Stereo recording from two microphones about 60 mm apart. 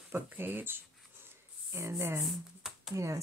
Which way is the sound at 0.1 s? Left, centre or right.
Right.